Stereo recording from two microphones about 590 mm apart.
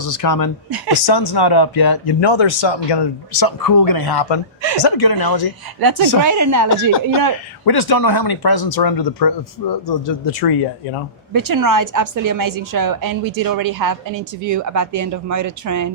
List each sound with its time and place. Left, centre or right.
0.0 s speech: left
5.8 s a woman's voice: right
7.6 s speech: left
11.3 s a woman's voice: right